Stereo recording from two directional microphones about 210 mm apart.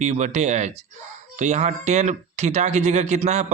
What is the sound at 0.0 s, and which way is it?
Speech, 35° right (ahead or behind).